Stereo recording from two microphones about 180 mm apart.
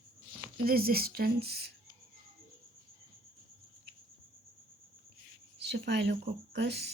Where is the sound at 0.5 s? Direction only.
55° right (ahead or behind).